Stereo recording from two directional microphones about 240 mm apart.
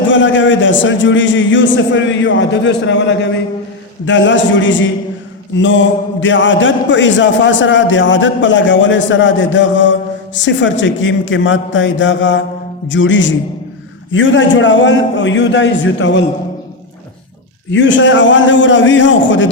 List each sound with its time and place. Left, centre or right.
0.1 s a man's voice: left
17.7 s a man's voice: left